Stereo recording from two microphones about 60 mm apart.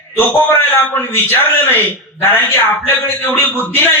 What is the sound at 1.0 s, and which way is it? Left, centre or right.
A man's voice, left.